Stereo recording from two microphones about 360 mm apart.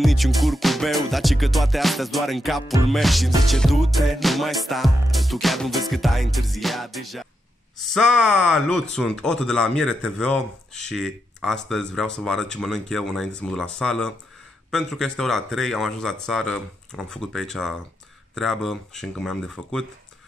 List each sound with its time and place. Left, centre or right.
0.0 s speech: centre